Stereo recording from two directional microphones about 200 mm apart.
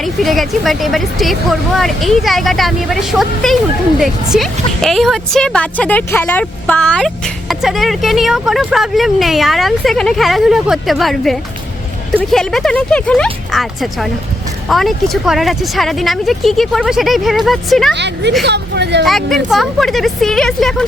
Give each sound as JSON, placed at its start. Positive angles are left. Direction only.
{"t": 0.0, "sound": "speech", "side_deg": 0}
{"t": 17.9, "sound": "speech", "side_deg": -60}
{"t": 19.0, "sound": "speech", "side_deg": 0}